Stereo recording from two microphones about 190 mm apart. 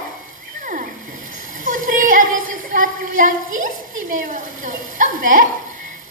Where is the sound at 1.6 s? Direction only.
45° right (ahead or behind).